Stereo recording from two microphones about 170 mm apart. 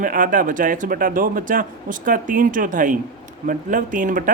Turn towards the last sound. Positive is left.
turn(degrees=-50)  # may be behind; listen again after turning